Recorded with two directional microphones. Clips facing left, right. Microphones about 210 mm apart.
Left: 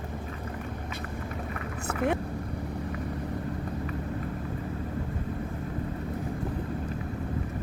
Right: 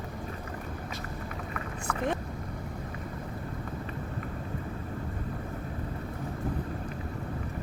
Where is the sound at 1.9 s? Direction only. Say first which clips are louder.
Left 3 dB; 25° left (ahead or behind).